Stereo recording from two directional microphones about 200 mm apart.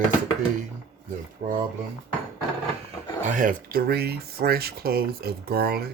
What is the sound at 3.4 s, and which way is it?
Speech, 45° right (ahead or behind).